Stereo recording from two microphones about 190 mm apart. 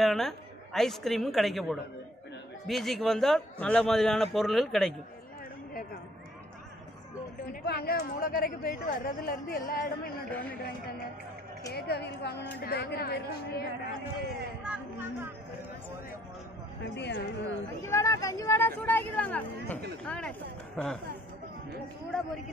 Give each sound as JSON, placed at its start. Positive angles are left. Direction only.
{"t": 0.0, "sound": "a woman's voice", "side_deg": 0}
{"t": 7.6, "sound": "speech", "side_deg": 55}
{"t": 11.7, "sound": "a woman's voice", "side_deg": 60}
{"t": 17.0, "sound": "speech", "side_deg": 70}
{"t": 17.8, "sound": "a woman's voice", "side_deg": 15}